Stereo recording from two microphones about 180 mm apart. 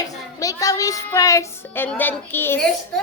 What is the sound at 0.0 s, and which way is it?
Child singing, 20° left (ahead or behind).